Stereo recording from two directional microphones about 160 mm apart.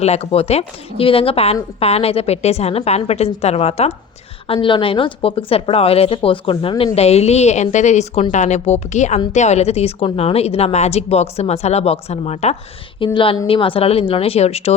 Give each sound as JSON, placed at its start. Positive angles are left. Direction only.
{"t": 0.0, "sound": "a woman's voice", "side_deg": 40}